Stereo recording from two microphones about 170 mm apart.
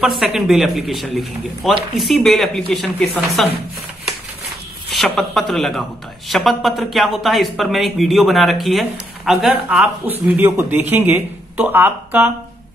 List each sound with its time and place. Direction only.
0.0 s a man's voice: centre (ahead or behind)
4.8 s a man's voice: centre (ahead or behind)